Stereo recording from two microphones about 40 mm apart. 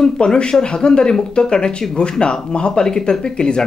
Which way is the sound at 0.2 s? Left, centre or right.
Left.